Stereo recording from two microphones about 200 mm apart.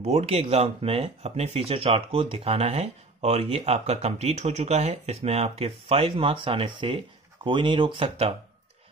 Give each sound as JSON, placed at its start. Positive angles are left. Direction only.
{"t": 0.0, "sound": "speech", "side_deg": -30}